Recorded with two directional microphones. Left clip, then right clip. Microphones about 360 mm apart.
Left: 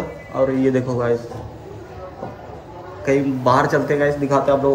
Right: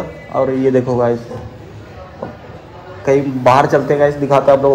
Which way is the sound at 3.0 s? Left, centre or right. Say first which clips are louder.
Right 5 dB; centre.